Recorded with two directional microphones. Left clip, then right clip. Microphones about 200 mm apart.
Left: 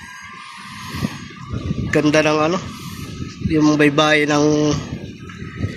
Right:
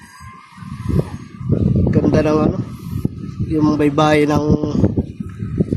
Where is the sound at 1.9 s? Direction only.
10° right (ahead or behind).